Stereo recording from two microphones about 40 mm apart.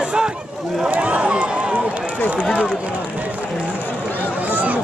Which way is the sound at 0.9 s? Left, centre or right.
Right.